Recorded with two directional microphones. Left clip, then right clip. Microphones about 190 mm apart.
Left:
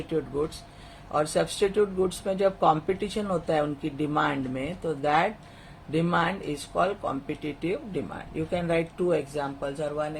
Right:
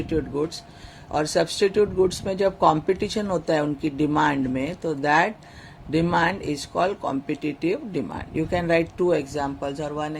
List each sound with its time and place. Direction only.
1.1 s speech: 35° right (ahead or behind)